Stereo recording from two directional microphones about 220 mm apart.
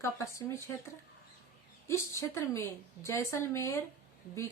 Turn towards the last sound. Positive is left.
turn(degrees=10)  # may be behind; listen again after turning